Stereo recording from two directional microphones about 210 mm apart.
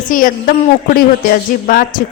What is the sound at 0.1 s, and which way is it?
Speech, 40° left (ahead or behind).